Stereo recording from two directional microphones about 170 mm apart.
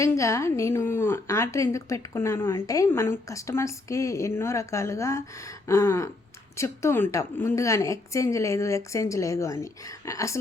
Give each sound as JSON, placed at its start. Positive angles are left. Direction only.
{"t": 0.0, "sound": "a woman's voice", "side_deg": 15}